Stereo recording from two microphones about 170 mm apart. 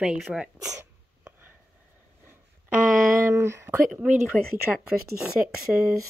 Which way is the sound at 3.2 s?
15° right (ahead or behind).